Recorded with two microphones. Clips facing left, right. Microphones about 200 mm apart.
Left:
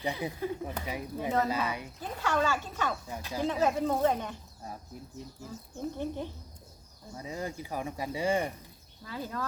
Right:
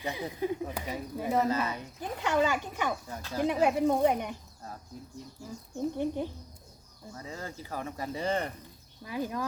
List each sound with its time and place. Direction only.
0.3 s speech: 15° right (ahead or behind)
0.9 s speech: 10° left (ahead or behind)
2.0 s speech: 15° right (ahead or behind)
3.1 s speech: 15° left (ahead or behind)
3.4 s speech: 15° right (ahead or behind)
5.4 s speech: 15° right (ahead or behind)
7.1 s speech: 15° left (ahead or behind)
9.0 s speech: 15° right (ahead or behind)